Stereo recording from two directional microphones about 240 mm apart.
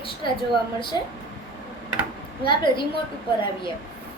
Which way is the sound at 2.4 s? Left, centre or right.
Centre.